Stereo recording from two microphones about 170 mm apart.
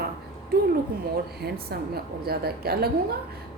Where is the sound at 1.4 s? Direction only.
65° right (ahead or behind).